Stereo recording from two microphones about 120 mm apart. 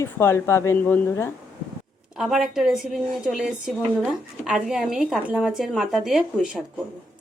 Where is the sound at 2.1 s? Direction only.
5° right (ahead or behind).